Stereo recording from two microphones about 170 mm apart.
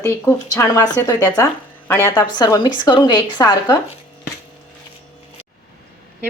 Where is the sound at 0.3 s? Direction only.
20° left (ahead or behind).